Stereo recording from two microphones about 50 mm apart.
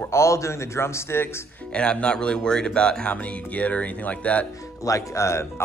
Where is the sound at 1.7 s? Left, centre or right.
Left.